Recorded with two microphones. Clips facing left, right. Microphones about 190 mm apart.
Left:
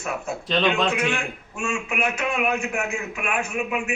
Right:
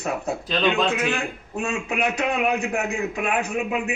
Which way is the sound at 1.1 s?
35° right (ahead or behind).